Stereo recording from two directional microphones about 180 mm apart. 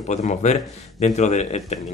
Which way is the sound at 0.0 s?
40° left (ahead or behind).